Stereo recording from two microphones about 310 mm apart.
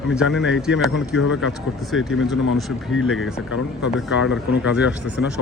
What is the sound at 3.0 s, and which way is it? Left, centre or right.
Speech, left.